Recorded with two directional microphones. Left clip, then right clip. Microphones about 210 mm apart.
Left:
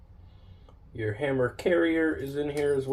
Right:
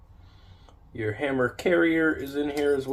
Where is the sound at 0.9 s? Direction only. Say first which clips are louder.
Right 1 dB; 30° right (ahead or behind).